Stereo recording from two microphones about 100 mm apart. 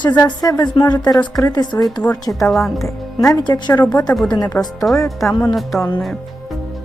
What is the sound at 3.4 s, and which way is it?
A woman's voice, 45° left (ahead or behind).